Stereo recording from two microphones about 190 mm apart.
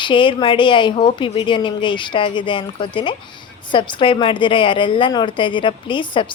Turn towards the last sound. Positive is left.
turn(degrees=25)  # may be behind; listen again after turning